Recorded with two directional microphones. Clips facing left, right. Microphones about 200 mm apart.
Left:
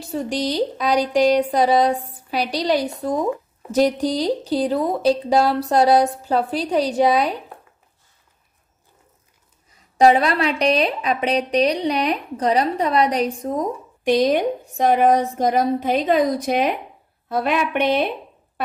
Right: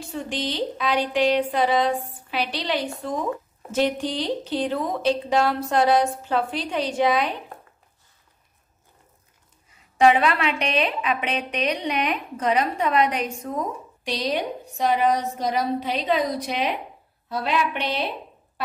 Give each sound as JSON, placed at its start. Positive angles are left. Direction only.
{"t": 0.0, "sound": "a woman's voice", "side_deg": 40}
{"t": 9.9, "sound": "a woman's voice", "side_deg": 40}
{"t": 14.0, "sound": "a woman's voice", "side_deg": 50}